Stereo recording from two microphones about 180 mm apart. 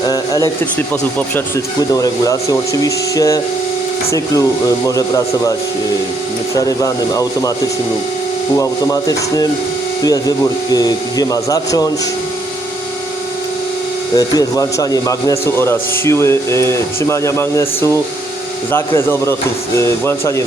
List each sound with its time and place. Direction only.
0.0 s speech: 20° left (ahead or behind)
1.8 s speech: 20° left (ahead or behind)
8.5 s speech: 20° left (ahead or behind)
14.2 s speech: 20° left (ahead or behind)